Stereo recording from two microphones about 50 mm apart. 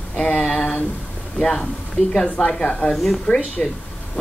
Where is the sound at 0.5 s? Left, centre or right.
Centre.